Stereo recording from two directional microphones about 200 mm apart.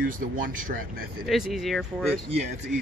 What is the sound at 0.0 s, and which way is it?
Speech, 45° right (ahead or behind).